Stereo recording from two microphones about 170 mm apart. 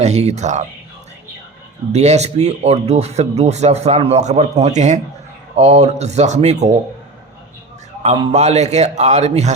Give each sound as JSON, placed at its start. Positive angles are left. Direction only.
{"t": 0.0, "sound": "speech", "side_deg": -40}
{"t": 1.9, "sound": "speech", "side_deg": -40}
{"t": 8.0, "sound": "a man's voice", "side_deg": -30}
{"t": 8.3, "sound": "speech", "side_deg": -40}